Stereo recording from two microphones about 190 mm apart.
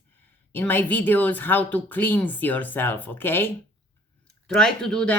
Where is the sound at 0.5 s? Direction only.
10° left (ahead or behind).